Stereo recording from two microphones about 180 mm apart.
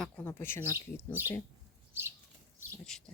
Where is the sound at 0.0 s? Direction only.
10° left (ahead or behind).